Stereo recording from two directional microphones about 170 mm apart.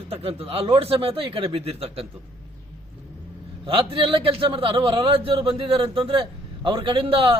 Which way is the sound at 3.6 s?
30° right (ahead or behind).